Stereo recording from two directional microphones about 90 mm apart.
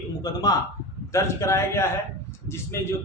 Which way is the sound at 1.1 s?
35° left (ahead or behind).